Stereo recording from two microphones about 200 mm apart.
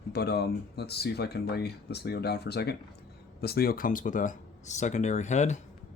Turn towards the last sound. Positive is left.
turn(degrees=35)  # may be behind; listen again after turning